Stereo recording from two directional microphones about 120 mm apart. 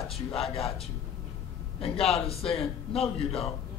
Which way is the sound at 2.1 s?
55° left (ahead or behind).